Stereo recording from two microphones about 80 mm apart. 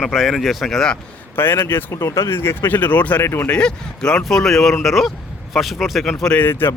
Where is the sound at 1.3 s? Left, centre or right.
Left.